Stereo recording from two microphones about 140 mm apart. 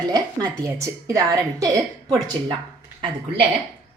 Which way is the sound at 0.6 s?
25° right (ahead or behind).